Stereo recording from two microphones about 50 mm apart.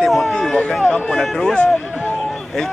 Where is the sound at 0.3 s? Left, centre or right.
Centre.